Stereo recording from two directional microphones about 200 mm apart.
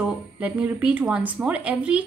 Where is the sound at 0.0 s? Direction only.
10° right (ahead or behind).